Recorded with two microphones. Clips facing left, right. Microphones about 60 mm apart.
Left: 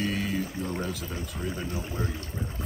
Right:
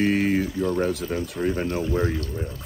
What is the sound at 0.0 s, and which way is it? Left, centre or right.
Speech, right.